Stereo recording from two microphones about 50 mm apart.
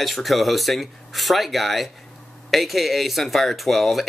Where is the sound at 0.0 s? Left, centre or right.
Centre.